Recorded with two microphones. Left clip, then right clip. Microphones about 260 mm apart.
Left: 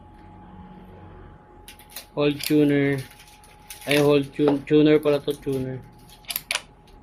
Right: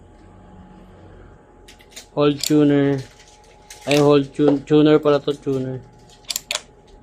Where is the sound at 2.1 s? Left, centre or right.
Centre.